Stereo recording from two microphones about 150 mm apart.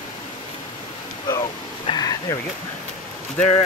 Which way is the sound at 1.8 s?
25° left (ahead or behind).